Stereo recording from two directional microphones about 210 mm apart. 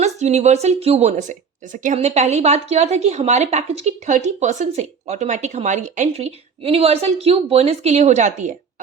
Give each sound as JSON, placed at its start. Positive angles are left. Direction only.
{"t": 0.0, "sound": "speech", "side_deg": -30}